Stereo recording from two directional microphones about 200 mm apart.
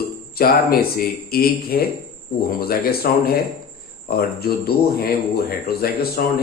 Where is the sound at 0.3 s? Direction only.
50° left (ahead or behind).